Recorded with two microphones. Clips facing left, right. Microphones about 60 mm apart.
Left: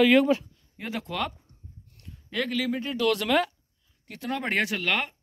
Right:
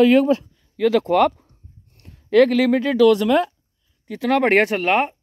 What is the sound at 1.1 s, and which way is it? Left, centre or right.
Speech, right.